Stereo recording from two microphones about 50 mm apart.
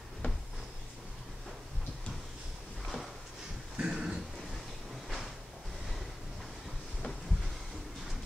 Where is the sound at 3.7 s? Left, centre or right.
Centre.